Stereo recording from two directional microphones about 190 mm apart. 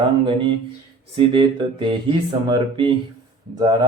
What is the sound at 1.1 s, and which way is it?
Speech, 25° right (ahead or behind).